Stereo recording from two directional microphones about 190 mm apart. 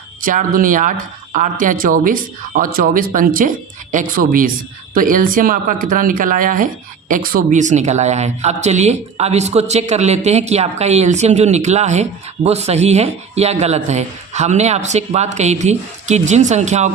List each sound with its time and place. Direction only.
0.2 s speech: 45° right (ahead or behind)